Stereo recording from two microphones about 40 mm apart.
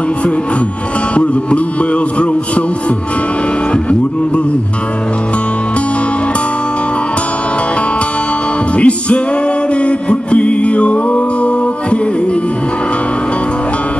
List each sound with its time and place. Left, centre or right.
1.1 s music: left
8.7 s music: left